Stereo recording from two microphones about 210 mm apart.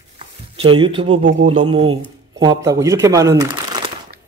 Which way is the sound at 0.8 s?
25° right (ahead or behind).